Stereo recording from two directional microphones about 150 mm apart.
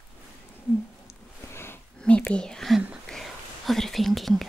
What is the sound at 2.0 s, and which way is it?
Whispering, 10° left (ahead or behind).